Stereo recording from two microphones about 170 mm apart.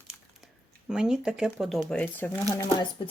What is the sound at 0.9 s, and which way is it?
Speech, 5° right (ahead or behind).